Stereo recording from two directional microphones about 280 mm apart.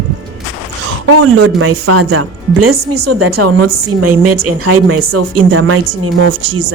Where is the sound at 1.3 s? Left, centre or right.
Right.